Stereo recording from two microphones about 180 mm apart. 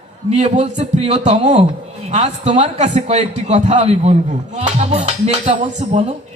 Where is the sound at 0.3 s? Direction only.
40° right (ahead or behind).